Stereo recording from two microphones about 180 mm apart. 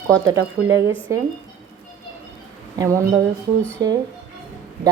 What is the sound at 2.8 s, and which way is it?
A woman's voice, 15° right (ahead or behind).